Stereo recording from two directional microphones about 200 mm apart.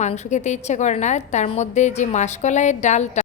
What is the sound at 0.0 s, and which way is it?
A woman's voice, 35° left (ahead or behind).